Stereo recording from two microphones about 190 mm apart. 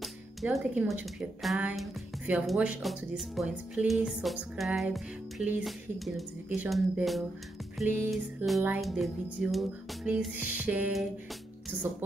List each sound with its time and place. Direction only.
0.0 s speech: centre (ahead or behind)
7.8 s music: 10° right (ahead or behind)
8.1 s speech: centre (ahead or behind)